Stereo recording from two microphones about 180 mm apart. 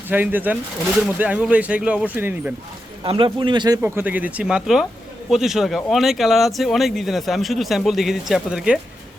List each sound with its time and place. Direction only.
0.1 s speech: 10° right (ahead or behind)
3.0 s a man's voice: 25° right (ahead or behind)
3.8 s speech: 10° right (ahead or behind)